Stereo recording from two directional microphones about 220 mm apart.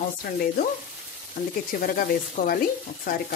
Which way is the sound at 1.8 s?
40° left (ahead or behind).